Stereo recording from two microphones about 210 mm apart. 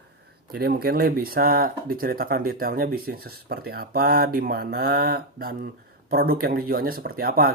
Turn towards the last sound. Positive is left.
turn(degrees=-45)  # may be behind; listen again after turning